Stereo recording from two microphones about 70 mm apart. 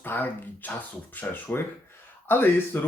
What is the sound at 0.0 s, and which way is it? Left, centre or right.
Speech, left.